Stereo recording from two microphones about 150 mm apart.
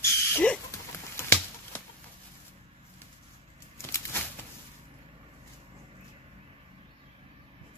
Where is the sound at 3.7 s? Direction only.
15° left (ahead or behind).